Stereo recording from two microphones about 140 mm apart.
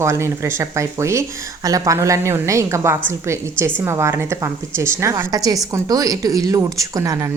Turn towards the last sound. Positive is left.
turn(degrees=-20)  # may be behind; listen again after turning